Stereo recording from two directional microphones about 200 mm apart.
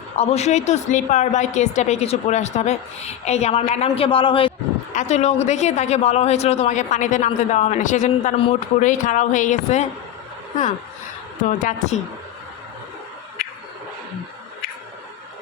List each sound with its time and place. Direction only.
0.2 s a man's voice: 35° left (ahead or behind)
11.4 s a man's voice: 40° left (ahead or behind)